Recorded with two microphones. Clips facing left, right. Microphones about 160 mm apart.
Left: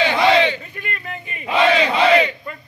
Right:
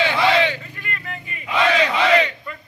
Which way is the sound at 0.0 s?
20° left (ahead or behind).